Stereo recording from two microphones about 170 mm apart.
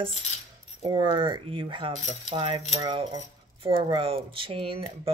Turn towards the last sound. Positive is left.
turn(degrees=-35)  # may be behind; listen again after turning